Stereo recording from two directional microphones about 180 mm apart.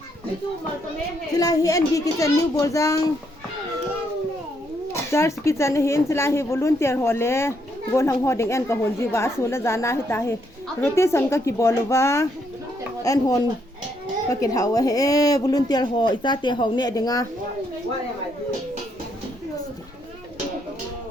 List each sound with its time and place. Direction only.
1.3 s a woman's voice: 20° left (ahead or behind)
4.9 s a woman's voice: 15° left (ahead or behind)